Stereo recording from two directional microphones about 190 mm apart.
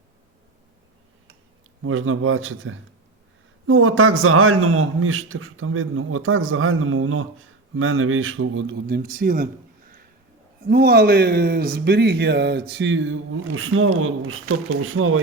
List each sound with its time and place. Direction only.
1.8 s a man's voice: 90° right; by 9.5 s 50° right (ahead or behind)
10.7 s a man's voice: 55° right (ahead or behind); by 15.2 s 90° right